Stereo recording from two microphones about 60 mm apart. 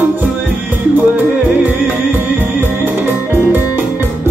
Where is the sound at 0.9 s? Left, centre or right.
Right.